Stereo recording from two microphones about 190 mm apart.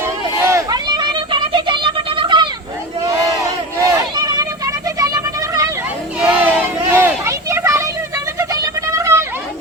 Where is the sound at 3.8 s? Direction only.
15° right (ahead or behind).